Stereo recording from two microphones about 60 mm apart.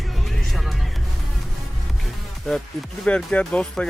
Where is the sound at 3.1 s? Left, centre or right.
Centre.